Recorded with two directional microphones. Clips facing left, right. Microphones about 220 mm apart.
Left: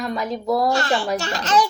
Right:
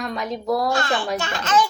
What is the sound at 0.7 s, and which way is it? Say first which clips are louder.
Speech: left 2 dB; 40° left (ahead or behind).